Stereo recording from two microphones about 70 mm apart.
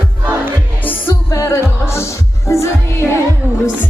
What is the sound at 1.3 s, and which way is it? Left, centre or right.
Music, left.